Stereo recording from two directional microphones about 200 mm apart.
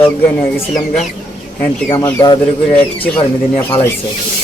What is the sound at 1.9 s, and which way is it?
Speech, 15° left (ahead or behind).